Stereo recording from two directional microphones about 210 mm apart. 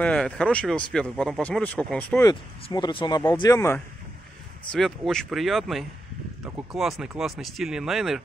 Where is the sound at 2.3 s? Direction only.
20° left (ahead or behind).